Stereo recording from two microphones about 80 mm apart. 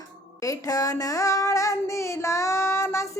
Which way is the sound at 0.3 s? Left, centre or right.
Left.